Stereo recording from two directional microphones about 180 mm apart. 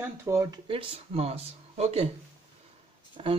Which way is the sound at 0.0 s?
15° right (ahead or behind).